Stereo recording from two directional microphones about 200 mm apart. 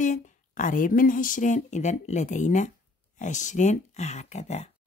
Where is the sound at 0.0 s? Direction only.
40° left (ahead or behind).